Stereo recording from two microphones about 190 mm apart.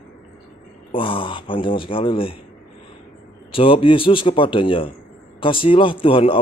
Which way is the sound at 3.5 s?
30° left (ahead or behind).